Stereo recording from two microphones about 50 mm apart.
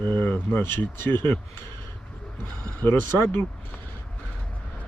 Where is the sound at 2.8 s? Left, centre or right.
Left.